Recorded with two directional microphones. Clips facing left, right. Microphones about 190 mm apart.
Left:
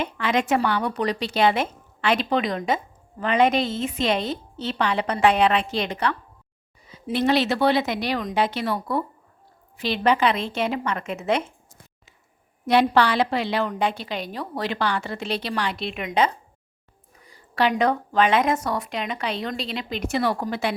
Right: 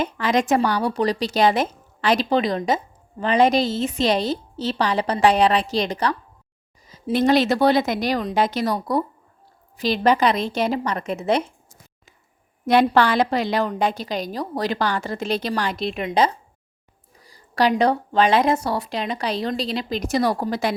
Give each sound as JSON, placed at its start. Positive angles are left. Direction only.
{"t": 0.0, "sound": "a woman's voice", "side_deg": -40}
{"t": 12.8, "sound": "speech", "side_deg": -45}